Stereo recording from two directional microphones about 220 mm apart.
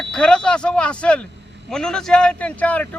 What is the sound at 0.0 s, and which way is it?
Speech, 5° left (ahead or behind).